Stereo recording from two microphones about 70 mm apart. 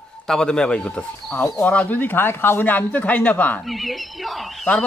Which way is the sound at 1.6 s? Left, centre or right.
Left.